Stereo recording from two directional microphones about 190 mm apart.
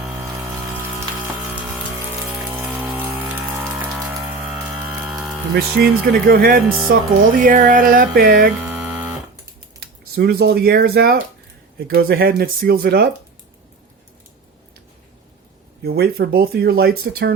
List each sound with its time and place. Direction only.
0.2 s pump: 15° right (ahead or behind)
2.3 s rain on surface: centre (ahead or behind)
3.0 s music: 10° right (ahead or behind)
5.5 s music: 55° right (ahead or behind)
6.9 s speech: 60° right (ahead or behind)
7.3 s music: 45° right (ahead or behind)
10.2 s speech: 55° right (ahead or behind)
11.9 s music: 55° right (ahead or behind)
15.8 s speech: 55° right (ahead or behind)